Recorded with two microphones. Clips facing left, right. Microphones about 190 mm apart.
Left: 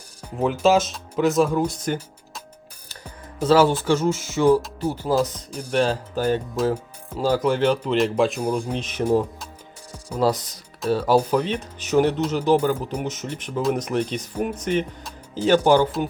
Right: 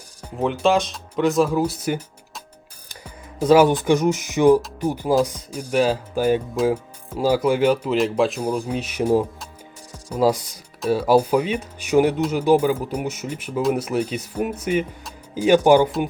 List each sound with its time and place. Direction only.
0.3 s speech: 5° left (ahead or behind)
2.9 s music: 10° right (ahead or behind)
3.8 s speech: 15° right (ahead or behind)